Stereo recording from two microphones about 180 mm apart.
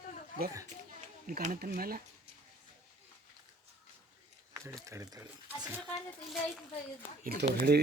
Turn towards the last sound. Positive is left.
turn(degrees=-65)  # may be behind; listen again after turning